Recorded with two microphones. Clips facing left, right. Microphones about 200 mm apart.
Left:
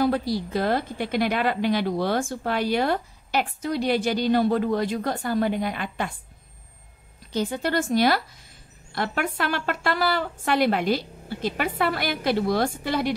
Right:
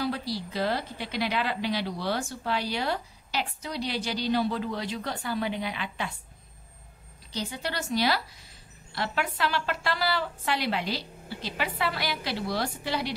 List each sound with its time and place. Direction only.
0.0 s a woman's voice: 50° left (ahead or behind)
7.3 s a woman's voice: 50° left (ahead or behind)